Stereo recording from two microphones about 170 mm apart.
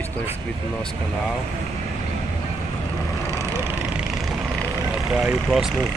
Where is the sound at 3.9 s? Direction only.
Centre (ahead or behind).